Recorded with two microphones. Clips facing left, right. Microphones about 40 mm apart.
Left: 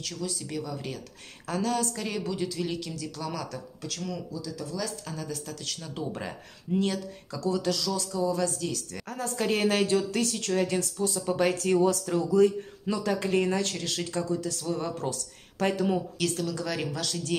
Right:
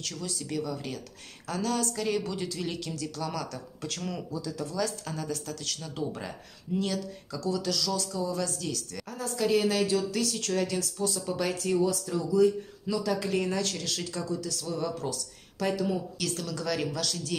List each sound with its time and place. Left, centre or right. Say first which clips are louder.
0.0 s speech: left 2 dB; centre
1.5 s speech: left 2 dB; centre
2.0 s speech: right 1 dB; centre
4.0 s speech: even; right
4.8 s speech: right 2 dB; centre
5.3 s speech: right 1 dB; centre
6.1 s speech: left 2 dB; left
9.1 s a woman's voice: right 1 dB; left
10.3 s speech: left 2 dB; centre
11.2 s a woman's voice: left 7 dB; left
11.6 s speech: left 3 dB; left
12.8 s a woman's voice: left 1 dB; left
16.3 s speech: left 1 dB; centre